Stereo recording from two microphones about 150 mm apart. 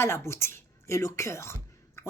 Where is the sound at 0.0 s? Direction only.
15° left (ahead or behind).